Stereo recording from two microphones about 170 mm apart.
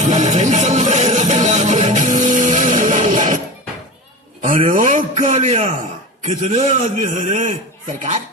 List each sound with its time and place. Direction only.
0.0 s music: 45° right (ahead or behind)
4.7 s a sound: 50° right (ahead or behind)
6.2 s a man's voice: 45° right (ahead or behind)